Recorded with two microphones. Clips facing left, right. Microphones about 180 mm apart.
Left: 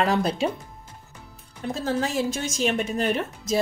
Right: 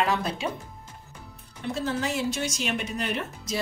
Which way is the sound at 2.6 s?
45° left (ahead or behind).